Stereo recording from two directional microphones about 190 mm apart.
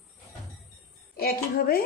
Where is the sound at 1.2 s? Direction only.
50° left (ahead or behind).